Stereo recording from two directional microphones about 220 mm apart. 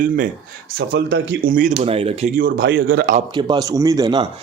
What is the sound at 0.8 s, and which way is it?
Speech, 50° right (ahead or behind).